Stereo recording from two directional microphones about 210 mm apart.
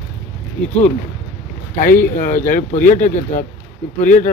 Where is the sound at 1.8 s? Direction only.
40° left (ahead or behind).